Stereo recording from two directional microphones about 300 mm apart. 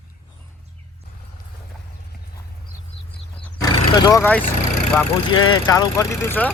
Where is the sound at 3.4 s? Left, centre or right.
Centre.